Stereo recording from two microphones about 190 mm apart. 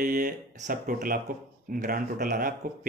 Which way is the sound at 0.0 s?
45° right (ahead or behind).